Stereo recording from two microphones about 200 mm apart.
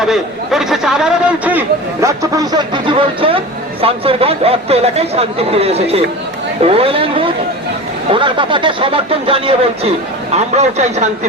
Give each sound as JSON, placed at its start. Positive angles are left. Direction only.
{"t": 0.0, "sound": "speech", "side_deg": 0}